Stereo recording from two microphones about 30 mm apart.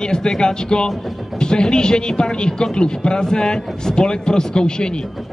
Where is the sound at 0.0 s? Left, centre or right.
Left.